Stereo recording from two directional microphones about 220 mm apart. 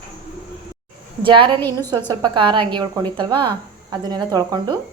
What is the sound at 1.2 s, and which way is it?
Frying, 20° right (ahead or behind).